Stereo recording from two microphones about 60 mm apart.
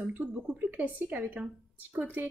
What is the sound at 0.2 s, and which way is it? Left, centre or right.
A woman's voice, right.